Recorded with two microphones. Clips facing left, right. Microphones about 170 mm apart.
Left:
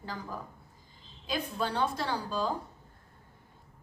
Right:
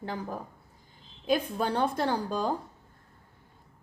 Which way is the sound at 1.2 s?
50° right (ahead or behind).